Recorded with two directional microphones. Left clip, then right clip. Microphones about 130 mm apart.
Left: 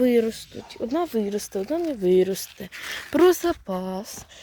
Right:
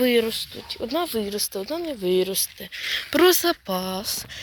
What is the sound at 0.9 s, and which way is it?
Speech, 65° left (ahead or behind).